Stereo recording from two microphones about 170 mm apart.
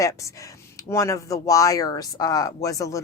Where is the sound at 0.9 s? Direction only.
20° left (ahead or behind).